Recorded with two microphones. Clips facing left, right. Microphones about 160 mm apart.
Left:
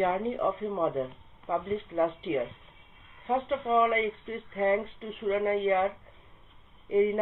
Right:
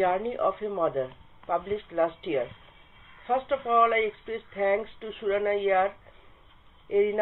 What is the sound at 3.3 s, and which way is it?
Speech, 30° left (ahead or behind).